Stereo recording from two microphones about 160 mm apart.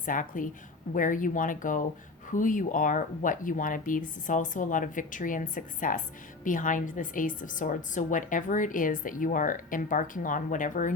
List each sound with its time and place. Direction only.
0.0 s a woman's voice: 55° left (ahead or behind)